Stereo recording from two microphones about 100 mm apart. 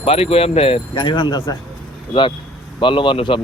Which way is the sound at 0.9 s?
50° left (ahead or behind).